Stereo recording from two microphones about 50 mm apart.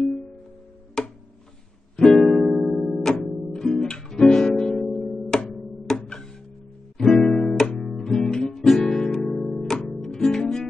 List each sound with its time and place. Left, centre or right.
0.0 s music: centre
7.0 s guitar: centre
8.8 s music: centre